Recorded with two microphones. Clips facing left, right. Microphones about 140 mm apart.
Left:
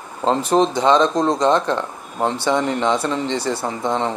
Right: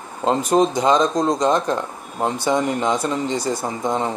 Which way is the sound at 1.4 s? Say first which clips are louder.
Left 2 dB; 10° right (ahead or behind).